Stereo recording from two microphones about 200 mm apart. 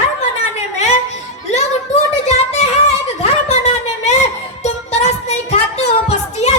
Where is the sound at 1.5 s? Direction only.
35° left (ahead or behind).